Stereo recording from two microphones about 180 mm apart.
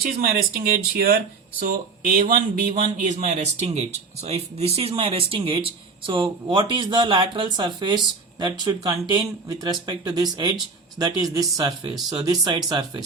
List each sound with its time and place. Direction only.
0.0 s speech: 55° right (ahead or behind)
3.0 s speech: 40° right (ahead or behind); by 13.0 s 20° right (ahead or behind)